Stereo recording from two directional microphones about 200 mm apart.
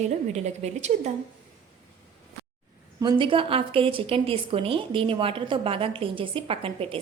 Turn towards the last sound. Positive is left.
turn(degrees=-30)  # may be behind; listen again after turning